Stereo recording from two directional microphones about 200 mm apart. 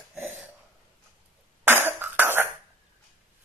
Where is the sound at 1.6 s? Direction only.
10° right (ahead or behind).